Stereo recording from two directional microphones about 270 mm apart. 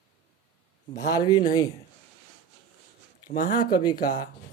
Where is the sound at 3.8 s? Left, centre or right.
Centre.